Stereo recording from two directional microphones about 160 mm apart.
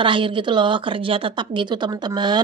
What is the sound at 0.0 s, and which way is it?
Speech, 30° right (ahead or behind).